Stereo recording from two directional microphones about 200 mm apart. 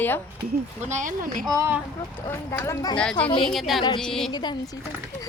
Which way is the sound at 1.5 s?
15° right (ahead or behind).